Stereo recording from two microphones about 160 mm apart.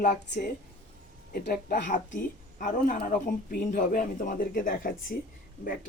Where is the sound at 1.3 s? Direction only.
60° left (ahead or behind).